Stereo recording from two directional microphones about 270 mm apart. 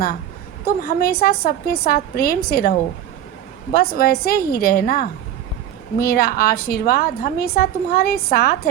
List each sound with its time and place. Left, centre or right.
0.6 s a woman's voice: left